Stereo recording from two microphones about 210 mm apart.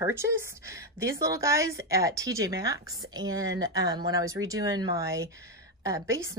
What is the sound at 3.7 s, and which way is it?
Speech, 15° right (ahead or behind).